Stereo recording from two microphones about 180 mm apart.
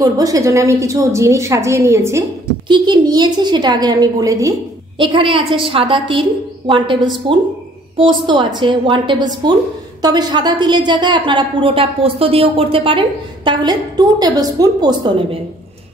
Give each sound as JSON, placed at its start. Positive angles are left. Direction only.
{"t": 0.0, "sound": "a woman's voice", "side_deg": -20}
{"t": 7.2, "sound": "a woman's voice", "side_deg": -30}